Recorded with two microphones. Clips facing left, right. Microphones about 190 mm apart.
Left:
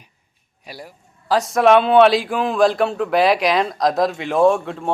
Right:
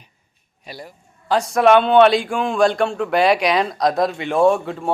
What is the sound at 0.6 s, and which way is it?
A man's voice, 10° left (ahead or behind).